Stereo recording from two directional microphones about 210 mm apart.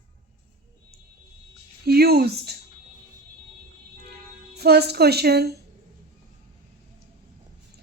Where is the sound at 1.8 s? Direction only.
50° right (ahead or behind).